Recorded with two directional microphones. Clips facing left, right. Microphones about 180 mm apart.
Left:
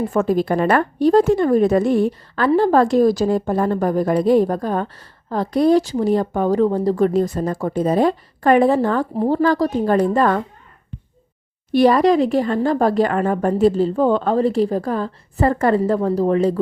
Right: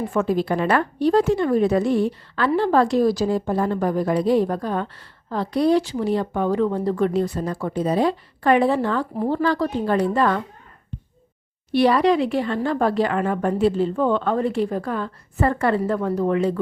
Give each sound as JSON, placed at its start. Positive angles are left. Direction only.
{"t": 0.1, "sound": "a woman's voice", "side_deg": 45}
{"t": 9.1, "sound": "speech", "side_deg": 30}
{"t": 9.4, "sound": "a woman's voice", "side_deg": 45}
{"t": 11.7, "sound": "speech", "side_deg": 45}